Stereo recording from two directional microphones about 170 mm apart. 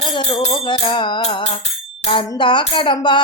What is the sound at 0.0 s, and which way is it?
Music, 35° left (ahead or behind).